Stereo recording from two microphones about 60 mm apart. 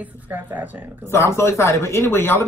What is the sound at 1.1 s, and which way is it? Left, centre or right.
Speech, left.